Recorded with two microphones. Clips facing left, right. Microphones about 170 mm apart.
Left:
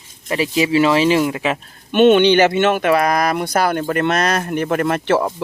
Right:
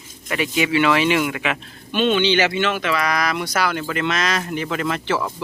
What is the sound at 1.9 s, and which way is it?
Speech, 55° left (ahead or behind).